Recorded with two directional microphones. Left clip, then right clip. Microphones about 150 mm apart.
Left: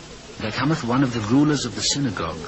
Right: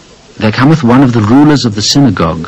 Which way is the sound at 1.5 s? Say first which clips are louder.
Right 13 dB; 40° right (ahead or behind).